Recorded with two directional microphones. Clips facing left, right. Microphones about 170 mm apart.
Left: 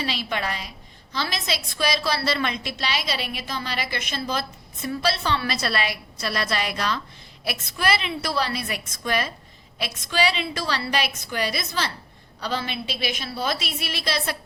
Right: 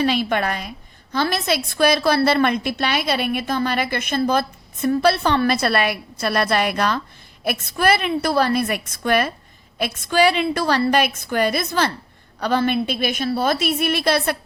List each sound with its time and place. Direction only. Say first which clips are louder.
0.0 s a woman's voice: right 8 dB; 50° right (ahead or behind)